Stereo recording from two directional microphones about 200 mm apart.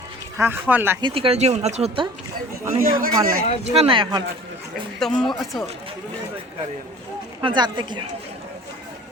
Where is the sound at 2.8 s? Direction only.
45° right (ahead or behind).